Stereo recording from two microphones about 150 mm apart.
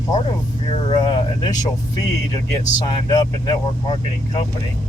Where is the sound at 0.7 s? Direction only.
35° left (ahead or behind).